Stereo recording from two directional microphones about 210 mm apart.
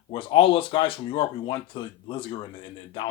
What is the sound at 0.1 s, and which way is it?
Speech, 25° left (ahead or behind).